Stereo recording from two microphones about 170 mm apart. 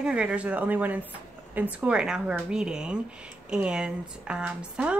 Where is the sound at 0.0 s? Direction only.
5° right (ahead or behind).